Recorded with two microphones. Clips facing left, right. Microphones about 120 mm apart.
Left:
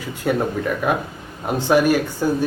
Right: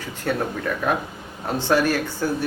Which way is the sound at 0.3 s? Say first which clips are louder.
Left 4 dB; 10° left (ahead or behind).